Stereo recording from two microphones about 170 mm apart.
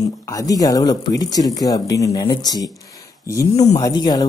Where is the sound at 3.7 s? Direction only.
25° left (ahead or behind).